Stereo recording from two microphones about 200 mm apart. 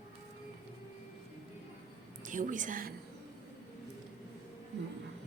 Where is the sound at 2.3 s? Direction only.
40° right (ahead or behind).